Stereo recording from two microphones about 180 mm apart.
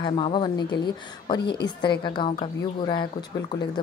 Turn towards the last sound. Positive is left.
turn(degrees=25)  # may be behind; listen again after turning